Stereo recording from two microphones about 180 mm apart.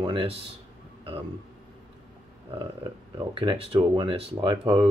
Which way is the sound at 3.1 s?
30° right (ahead or behind).